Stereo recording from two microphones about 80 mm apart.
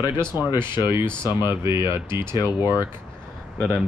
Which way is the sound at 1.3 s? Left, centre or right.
Left.